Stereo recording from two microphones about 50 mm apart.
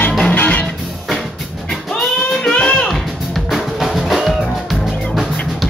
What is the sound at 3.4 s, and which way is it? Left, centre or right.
Music, centre.